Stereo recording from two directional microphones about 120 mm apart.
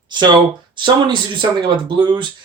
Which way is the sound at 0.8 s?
40° right (ahead or behind).